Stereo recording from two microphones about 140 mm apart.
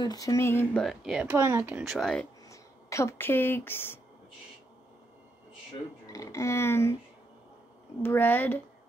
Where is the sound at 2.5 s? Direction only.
20° left (ahead or behind).